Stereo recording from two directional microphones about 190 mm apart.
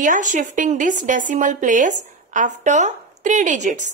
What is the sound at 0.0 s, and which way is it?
A woman's voice, 40° right (ahead or behind).